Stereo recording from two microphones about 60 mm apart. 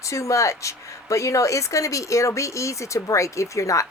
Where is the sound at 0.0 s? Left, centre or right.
Left.